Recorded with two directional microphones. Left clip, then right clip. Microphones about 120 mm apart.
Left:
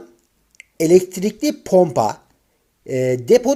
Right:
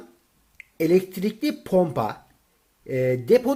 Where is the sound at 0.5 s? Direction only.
35° left (ahead or behind).